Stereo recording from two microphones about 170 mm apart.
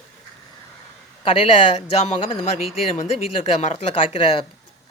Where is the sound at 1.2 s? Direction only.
35° left (ahead or behind).